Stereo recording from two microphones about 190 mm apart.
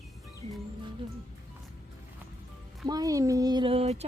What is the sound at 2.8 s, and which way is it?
Speech, 20° right (ahead or behind).